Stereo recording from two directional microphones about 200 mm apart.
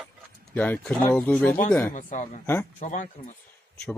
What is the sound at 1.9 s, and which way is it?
A man's voice, 40° left (ahead or behind).